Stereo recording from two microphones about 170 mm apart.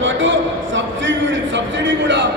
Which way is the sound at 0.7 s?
90° right.